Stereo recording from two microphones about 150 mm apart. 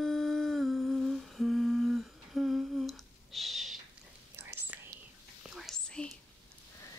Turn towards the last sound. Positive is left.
turn(degrees=5)  # may be behind; listen again after turning